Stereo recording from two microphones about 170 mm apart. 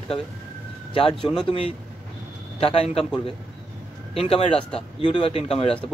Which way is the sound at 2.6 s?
35° left (ahead or behind).